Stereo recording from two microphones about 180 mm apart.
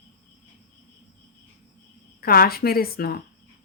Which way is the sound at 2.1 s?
55° left (ahead or behind).